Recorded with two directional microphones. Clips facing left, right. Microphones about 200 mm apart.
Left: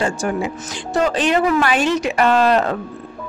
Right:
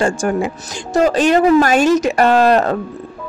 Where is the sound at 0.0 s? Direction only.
50° right (ahead or behind).